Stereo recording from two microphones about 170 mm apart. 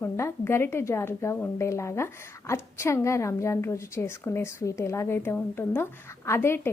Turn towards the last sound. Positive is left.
turn(degrees=15)  # may be behind; listen again after turning